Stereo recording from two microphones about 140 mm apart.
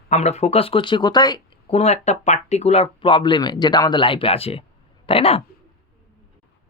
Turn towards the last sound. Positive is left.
turn(degrees=45)  # may be behind; listen again after turning